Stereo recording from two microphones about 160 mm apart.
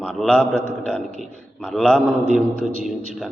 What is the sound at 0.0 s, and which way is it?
A man's voice, 5° left (ahead or behind).